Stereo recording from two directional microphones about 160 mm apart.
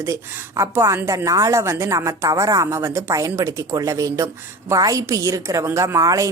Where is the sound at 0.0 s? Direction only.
20° right (ahead or behind).